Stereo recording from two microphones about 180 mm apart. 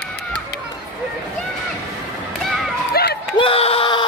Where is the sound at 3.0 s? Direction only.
60° left (ahead or behind).